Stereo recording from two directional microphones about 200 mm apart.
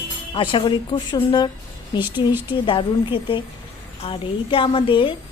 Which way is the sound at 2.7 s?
25° left (ahead or behind).